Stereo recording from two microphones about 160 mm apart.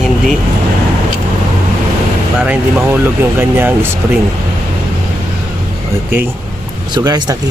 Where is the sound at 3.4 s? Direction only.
15° right (ahead or behind).